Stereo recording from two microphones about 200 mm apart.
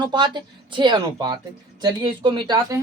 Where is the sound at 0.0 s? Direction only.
20° right (ahead or behind).